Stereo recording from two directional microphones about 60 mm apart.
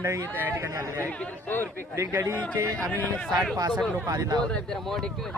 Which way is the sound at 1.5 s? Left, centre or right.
Left.